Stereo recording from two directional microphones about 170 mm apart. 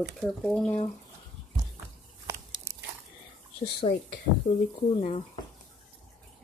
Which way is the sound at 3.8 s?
40° left (ahead or behind).